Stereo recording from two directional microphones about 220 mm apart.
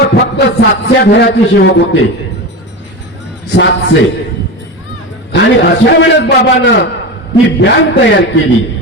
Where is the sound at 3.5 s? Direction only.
50° left (ahead or behind).